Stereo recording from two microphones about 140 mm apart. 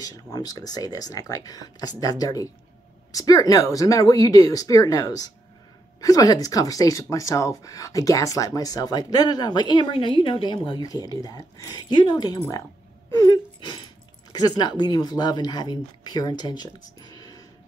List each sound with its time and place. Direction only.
0.0 s speech: 25° left (ahead or behind)
13.1 s wheeze: 25° left (ahead or behind)
14.3 s speech: 30° left (ahead or behind)